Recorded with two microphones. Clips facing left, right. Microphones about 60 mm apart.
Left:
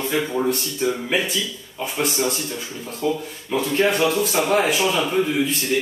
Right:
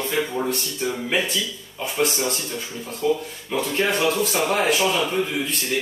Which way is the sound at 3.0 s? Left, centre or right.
Centre.